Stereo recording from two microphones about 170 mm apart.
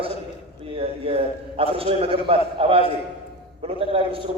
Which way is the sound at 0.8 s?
35° right (ahead or behind).